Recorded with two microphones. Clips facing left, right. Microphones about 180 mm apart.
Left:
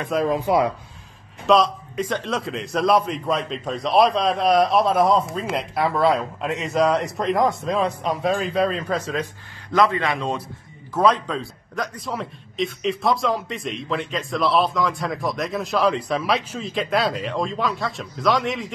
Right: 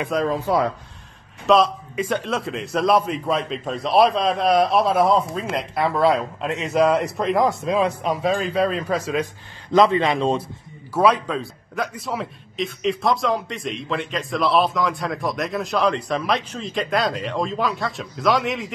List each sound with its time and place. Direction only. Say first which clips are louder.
0.3 s speech: left 1 dB; 15° left (ahead or behind)
1.5 s a man's voice: right 1 dB; 5° right (ahead or behind)
9.7 s a man's voice: right 3 dB; 25° right (ahead or behind)
10.9 s a man's voice: right 1 dB; 10° right (ahead or behind)